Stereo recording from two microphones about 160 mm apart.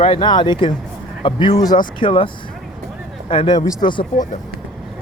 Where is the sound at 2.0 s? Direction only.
35° left (ahead or behind).